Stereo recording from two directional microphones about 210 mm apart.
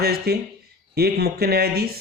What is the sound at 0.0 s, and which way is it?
Speech, 50° right (ahead or behind).